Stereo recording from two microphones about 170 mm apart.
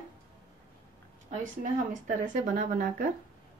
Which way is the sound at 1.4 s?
50° right (ahead or behind).